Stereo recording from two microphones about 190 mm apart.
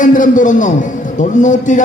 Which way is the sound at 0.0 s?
45° left (ahead or behind).